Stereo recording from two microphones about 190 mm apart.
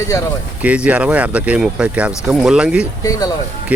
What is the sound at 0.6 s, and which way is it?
Speech, 5° right (ahead or behind).